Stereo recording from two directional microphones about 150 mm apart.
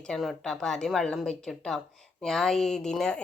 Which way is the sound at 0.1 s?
5° left (ahead or behind).